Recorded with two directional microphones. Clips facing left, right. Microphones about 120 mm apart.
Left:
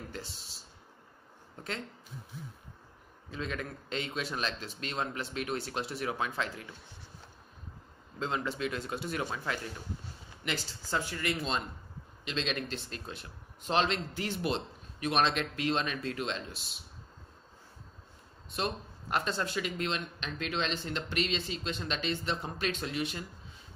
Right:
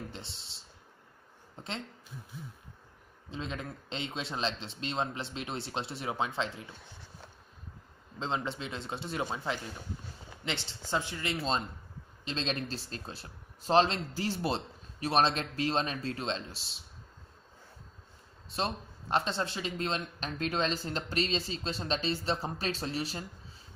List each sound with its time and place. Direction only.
0.1 s speech: 25° right (ahead or behind)
3.3 s speech: 25° right (ahead or behind)
8.2 s speech: 25° right (ahead or behind)
18.5 s speech: 30° right (ahead or behind)